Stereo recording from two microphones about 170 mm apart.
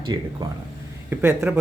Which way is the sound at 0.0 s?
25° right (ahead or behind).